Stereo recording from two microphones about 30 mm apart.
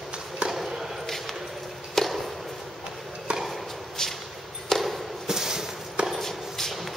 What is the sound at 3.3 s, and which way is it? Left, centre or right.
Chop, right.